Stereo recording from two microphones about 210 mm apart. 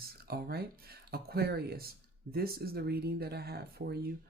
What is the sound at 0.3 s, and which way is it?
Speech, 45° right (ahead or behind).